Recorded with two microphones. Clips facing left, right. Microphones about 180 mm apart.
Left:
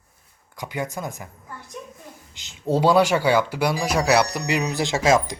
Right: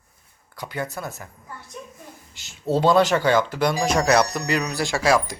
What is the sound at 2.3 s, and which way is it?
Speech, 20° left (ahead or behind).